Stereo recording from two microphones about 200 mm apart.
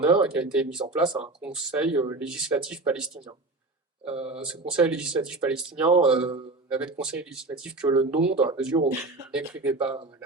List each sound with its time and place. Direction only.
0.0 s speech: 5° right (ahead or behind)
8.7 s speech: 20° right (ahead or behind)
9.3 s speech: 5° right (ahead or behind)